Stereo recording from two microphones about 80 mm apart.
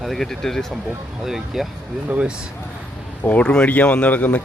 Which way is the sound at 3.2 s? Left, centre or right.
Centre.